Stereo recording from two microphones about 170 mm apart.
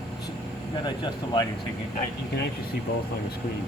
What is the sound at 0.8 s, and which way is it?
Speech, 25° left (ahead or behind).